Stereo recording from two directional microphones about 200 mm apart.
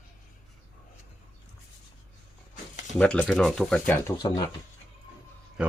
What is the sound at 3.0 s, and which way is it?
Speech, 5° left (ahead or behind).